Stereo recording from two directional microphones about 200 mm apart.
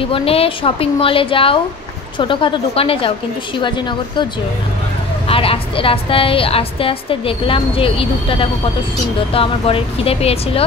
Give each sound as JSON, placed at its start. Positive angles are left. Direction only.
{"t": 0.0, "sound": "a woman's voice", "side_deg": 30}
{"t": 5.3, "sound": "a woman's voice", "side_deg": 30}